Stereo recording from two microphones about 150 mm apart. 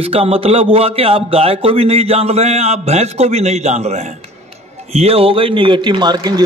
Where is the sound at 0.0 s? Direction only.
40° right (ahead or behind).